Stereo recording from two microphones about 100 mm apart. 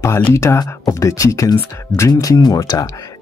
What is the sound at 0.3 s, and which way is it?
Speech, 30° left (ahead or behind).